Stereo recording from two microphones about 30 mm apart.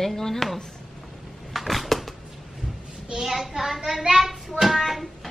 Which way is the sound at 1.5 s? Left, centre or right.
Centre.